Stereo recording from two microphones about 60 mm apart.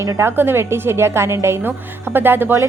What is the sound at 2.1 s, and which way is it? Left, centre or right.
Speech, right.